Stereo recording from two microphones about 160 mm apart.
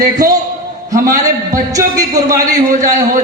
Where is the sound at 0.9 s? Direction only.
20° right (ahead or behind).